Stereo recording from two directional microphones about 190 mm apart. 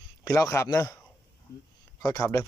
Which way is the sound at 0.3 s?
15° left (ahead or behind).